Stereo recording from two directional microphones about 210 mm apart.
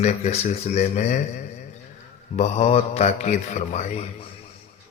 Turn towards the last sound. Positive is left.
turn(degrees=30)  # may be behind; listen again after turning